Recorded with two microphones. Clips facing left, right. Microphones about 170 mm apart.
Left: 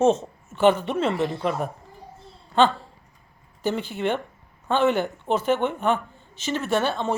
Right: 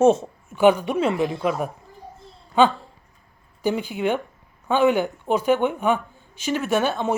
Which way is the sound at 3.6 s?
10° right (ahead or behind).